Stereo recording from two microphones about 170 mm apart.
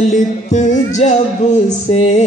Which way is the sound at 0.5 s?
45° left (ahead or behind).